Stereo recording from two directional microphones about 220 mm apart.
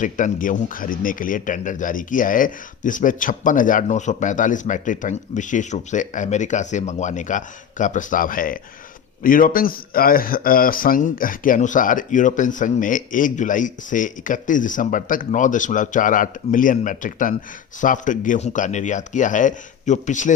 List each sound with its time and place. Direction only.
0.0 s speech: 35° left (ahead or behind)